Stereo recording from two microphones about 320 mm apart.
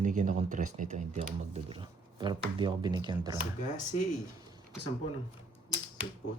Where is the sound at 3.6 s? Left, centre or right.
Left.